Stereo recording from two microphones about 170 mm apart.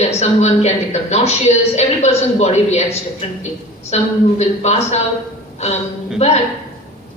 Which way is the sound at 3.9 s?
40° left (ahead or behind).